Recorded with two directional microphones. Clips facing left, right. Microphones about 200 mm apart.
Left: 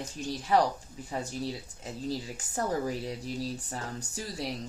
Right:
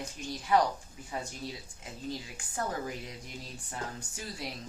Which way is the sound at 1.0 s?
35° left (ahead or behind).